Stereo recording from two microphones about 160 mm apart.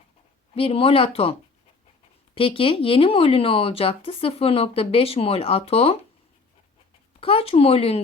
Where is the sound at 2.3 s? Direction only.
35° left (ahead or behind).